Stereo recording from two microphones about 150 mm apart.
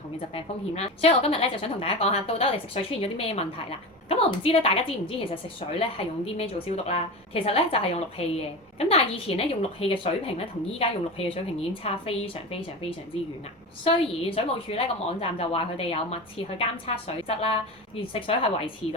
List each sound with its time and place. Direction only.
0.3 s a woman's voice: 40° left (ahead or behind)